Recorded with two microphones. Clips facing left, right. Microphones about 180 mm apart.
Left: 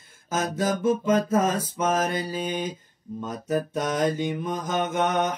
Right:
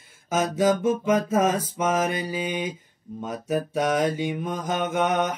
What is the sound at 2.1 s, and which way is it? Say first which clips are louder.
Mantra: even; 15° right (ahead or behind).